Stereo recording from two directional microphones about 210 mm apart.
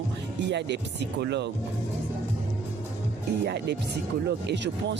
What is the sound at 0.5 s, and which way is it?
Speech, 55° right (ahead or behind).